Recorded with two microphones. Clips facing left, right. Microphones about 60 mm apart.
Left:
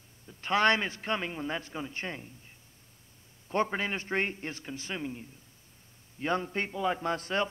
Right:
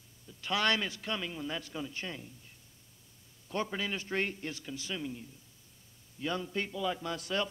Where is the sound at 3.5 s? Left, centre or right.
Left.